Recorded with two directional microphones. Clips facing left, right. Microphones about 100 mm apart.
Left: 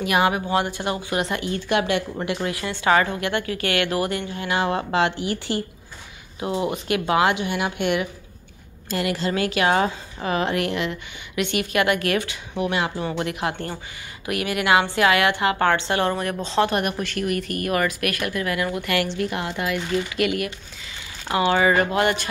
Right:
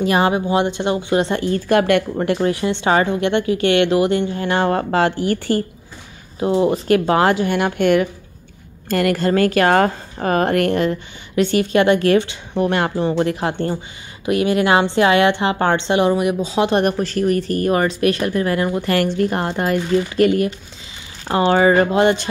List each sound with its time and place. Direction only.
0.0 s a woman's voice: 30° right (ahead or behind); by 2.0 s 50° right (ahead or behind)
2.1 s a woman's voice: 35° right (ahead or behind)
4.4 s a woman's voice: 40° right (ahead or behind)
6.4 s a woman's voice: 30° right (ahead or behind)
12.5 s a woman's voice: 45° right (ahead or behind)
13.0 s a woman's voice: 30° right (ahead or behind); by 16.6 s 10° right (ahead or behind)
16.7 s a woman's voice: 35° right (ahead or behind)